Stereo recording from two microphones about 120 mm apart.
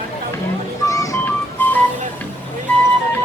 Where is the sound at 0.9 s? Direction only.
30° left (ahead or behind).